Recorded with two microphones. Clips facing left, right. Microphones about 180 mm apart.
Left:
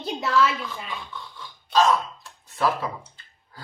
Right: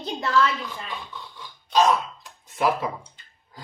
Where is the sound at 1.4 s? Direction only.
15° right (ahead or behind).